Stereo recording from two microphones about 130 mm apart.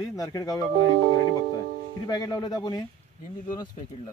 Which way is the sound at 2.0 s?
30° left (ahead or behind).